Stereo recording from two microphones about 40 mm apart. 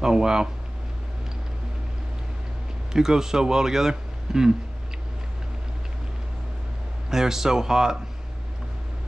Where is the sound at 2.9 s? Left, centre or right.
Centre.